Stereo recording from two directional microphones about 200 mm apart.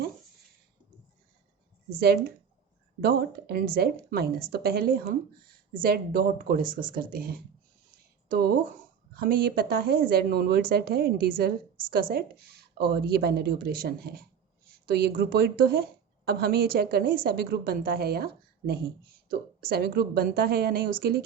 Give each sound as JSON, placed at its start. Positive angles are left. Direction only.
{"t": 3.0, "sound": "a woman's voice", "side_deg": -50}
{"t": 9.1, "sound": "a woman's voice", "side_deg": -45}